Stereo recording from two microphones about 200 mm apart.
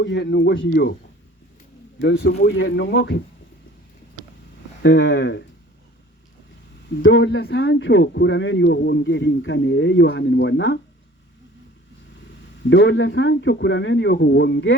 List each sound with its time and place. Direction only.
0.0 s speech: 60° left (ahead or behind)
2.0 s speech: 60° left (ahead or behind)
4.8 s speech: 60° left (ahead or behind)
7.0 s speech: 65° left (ahead or behind)
12.6 s speech: 60° left (ahead or behind)